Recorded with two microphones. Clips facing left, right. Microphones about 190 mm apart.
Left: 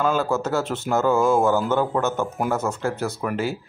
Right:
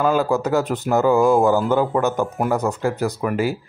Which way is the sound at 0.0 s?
10° right (ahead or behind).